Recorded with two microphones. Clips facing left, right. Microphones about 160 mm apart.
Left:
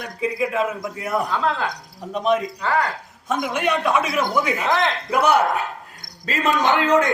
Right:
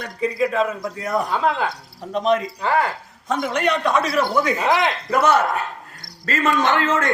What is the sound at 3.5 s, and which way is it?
A man's voice, 5° left (ahead or behind).